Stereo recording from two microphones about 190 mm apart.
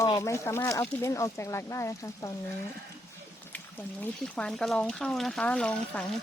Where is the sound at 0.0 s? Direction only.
15° left (ahead or behind).